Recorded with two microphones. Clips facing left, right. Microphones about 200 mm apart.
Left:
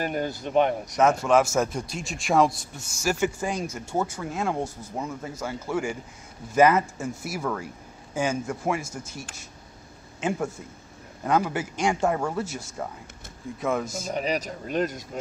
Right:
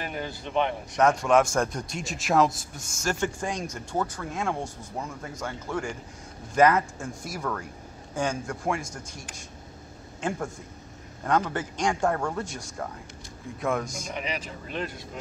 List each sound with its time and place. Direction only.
0.0 s speech: 45° left (ahead or behind)
0.9 s speech: 5° left (ahead or behind)
11.2 s a man's voice: 10° left (ahead or behind)
14.0 s speech: 40° left (ahead or behind)